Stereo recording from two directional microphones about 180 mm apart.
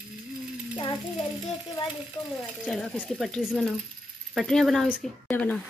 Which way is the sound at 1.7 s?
25° left (ahead or behind).